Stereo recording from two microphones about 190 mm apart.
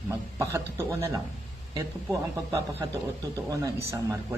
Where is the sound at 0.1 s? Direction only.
15° right (ahead or behind).